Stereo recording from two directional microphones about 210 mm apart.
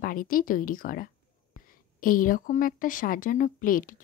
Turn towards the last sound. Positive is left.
turn(degrees=40)  # may be behind; listen again after turning